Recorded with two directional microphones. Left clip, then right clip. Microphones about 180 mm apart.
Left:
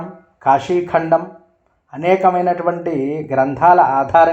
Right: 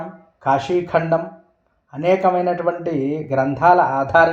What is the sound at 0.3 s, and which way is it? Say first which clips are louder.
Speech: left 4 dB; 35° left (ahead or behind).